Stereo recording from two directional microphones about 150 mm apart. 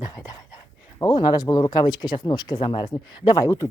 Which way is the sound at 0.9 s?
30° left (ahead or behind).